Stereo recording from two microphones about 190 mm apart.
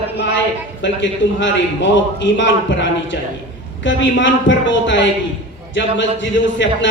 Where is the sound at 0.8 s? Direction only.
75° left (ahead or behind).